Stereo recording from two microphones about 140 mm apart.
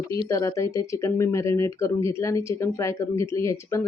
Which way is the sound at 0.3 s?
20° left (ahead or behind).